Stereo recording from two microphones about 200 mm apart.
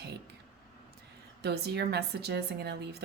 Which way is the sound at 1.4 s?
55° right (ahead or behind).